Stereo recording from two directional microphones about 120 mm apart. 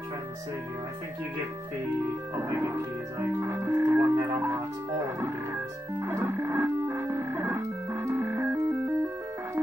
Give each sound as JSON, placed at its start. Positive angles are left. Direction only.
{"t": 2.3, "sound": "organ", "side_deg": -25}
{"t": 6.0, "sound": "music", "side_deg": -20}